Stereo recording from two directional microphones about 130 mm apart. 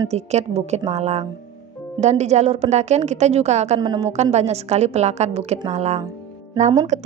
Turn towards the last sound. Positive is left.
turn(degrees=-60)  # may be behind; listen again after turning